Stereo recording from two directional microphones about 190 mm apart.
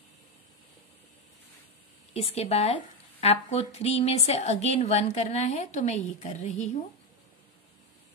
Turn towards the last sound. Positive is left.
turn(degrees=40)  # may be behind; listen again after turning